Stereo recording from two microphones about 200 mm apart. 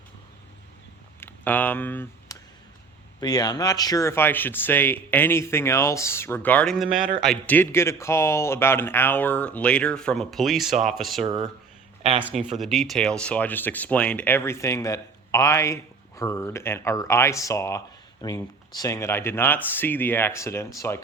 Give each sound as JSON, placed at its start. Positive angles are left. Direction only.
{"t": 1.2, "sound": "a sound", "side_deg": 10}
{"t": 3.2, "sound": "speech", "side_deg": 20}
{"t": 7.3, "sound": "speech", "side_deg": 10}
{"t": 11.3, "sound": "speech", "side_deg": -20}
{"t": 12.2, "sound": "speech", "side_deg": -5}